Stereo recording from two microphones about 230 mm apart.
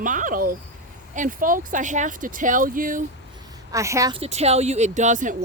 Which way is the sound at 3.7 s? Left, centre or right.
Centre.